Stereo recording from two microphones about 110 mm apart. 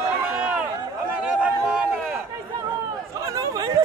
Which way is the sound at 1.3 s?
10° right (ahead or behind).